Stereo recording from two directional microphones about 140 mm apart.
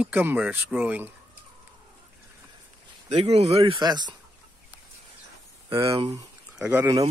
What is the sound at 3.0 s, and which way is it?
Speech, 45° right (ahead or behind).